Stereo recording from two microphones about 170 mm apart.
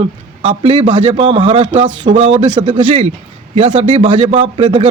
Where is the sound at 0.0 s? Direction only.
30° right (ahead or behind).